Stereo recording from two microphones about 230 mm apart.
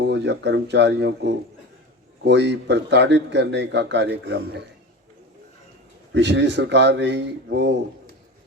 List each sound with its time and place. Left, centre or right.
0.0 s speech: right
6.1 s speech: right